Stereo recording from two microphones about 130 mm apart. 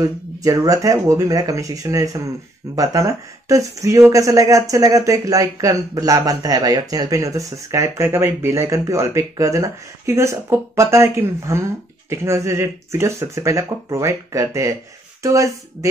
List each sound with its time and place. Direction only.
0.0 s speech: 25° right (ahead or behind)